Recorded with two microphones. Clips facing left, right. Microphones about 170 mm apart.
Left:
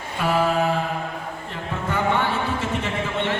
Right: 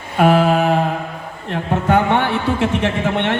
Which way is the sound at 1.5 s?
70° right (ahead or behind).